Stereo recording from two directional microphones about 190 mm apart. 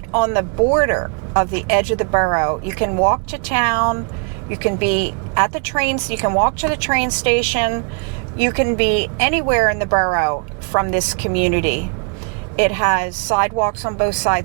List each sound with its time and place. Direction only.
0.1 s speech: 15° right (ahead or behind)
6.2 s speech: 20° right (ahead or behind)
6.6 s speech: 10° right (ahead or behind)